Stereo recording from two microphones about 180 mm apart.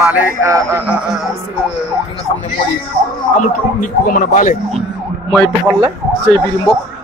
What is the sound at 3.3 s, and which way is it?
Speech, 45° left (ahead or behind).